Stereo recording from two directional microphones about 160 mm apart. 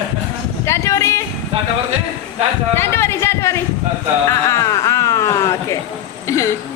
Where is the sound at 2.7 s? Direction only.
15° left (ahead or behind).